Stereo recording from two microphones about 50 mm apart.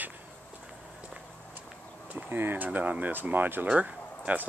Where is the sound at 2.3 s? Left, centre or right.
Right.